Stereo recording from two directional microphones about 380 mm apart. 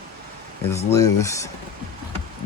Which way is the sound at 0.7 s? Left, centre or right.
Centre.